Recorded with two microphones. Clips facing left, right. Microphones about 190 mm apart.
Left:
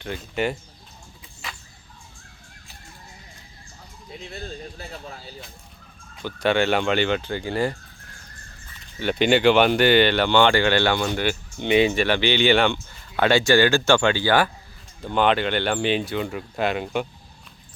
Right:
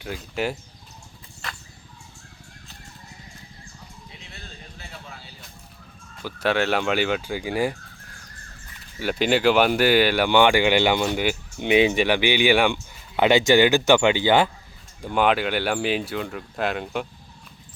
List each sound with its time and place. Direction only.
0.0 s speech: 5° right (ahead or behind)
1.4 s a sound: 5° left (ahead or behind)
4.3 s speech: 40° left (ahead or behind)
6.2 s speech: centre (ahead or behind)
9.0 s speech: 5° right (ahead or behind); by 14.5 s 20° right (ahead or behind)
15.0 s speech: 10° right (ahead or behind)